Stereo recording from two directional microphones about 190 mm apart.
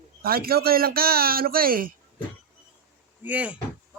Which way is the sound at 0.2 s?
50° right (ahead or behind).